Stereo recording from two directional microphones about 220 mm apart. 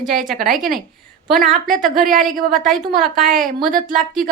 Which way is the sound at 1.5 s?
40° right (ahead or behind).